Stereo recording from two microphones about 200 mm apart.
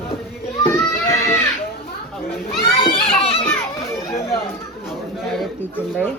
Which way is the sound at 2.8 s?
25° left (ahead or behind).